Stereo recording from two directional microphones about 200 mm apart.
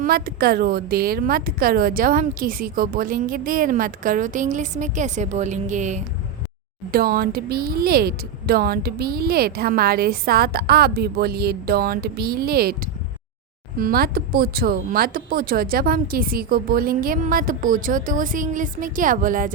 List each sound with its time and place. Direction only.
0.0 s speech: 50° right (ahead or behind)
6.9 s speech: 50° right (ahead or behind)